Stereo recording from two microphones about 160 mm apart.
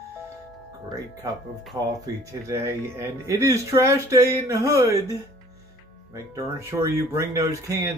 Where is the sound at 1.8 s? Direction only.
20° right (ahead or behind).